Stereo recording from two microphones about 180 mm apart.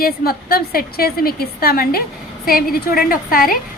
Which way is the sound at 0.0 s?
55° left (ahead or behind).